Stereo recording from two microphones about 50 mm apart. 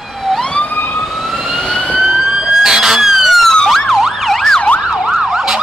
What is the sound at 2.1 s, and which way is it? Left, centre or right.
Emergency vehicle, centre.